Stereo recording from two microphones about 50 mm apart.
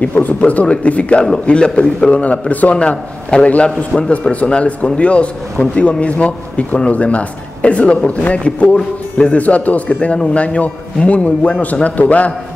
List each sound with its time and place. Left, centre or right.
0.4 s a man's voice: left